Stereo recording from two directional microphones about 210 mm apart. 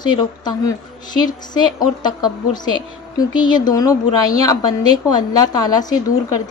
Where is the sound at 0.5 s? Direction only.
20° left (ahead or behind).